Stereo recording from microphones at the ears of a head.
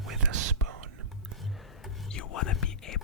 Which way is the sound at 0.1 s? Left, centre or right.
Right.